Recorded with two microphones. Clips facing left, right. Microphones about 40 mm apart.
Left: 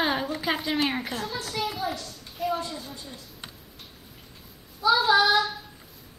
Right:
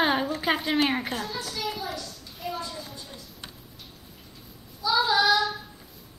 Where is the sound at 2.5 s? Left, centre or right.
Left.